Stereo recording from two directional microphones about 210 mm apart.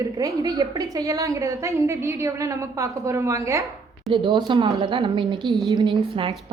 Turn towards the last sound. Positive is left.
turn(degrees=-25)  # may be behind; listen again after turning